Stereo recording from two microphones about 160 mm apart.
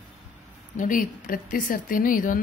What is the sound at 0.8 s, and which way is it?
Speech, 55° left (ahead or behind).